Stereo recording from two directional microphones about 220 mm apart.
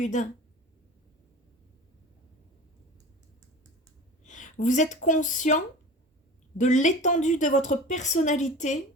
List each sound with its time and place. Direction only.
0.0 s a woman's voice: 35° left (ahead or behind)
4.2 s a sound: 35° left (ahead or behind)
5.0 s a woman's voice: 35° left (ahead or behind)